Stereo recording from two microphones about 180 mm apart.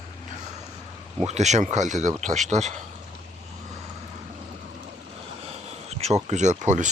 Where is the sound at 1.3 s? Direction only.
40° right (ahead or behind).